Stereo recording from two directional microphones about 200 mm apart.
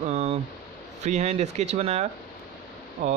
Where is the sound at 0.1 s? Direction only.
35° right (ahead or behind).